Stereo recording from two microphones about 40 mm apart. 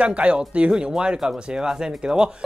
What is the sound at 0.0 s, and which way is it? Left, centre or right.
Speech, right.